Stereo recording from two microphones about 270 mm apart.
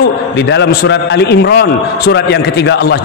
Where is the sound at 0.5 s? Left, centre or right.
Left.